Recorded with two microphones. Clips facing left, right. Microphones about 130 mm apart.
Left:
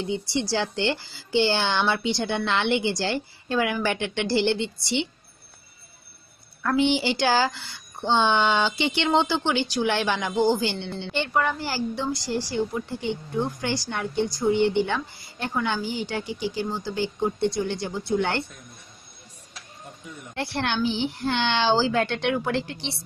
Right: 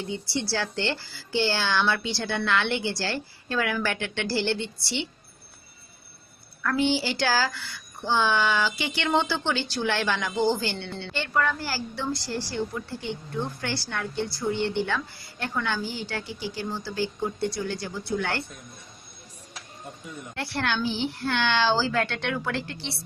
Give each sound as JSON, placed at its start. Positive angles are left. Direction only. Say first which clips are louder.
{"t": 0.1, "sound": "a woman's voice", "louder": "left 3 dB", "side_deg": 20}
{"t": 6.6, "sound": "a woman's voice", "louder": "left 3 dB", "side_deg": 20}
{"t": 20.3, "sound": "a woman's voice", "louder": "left 2 dB", "side_deg": 20}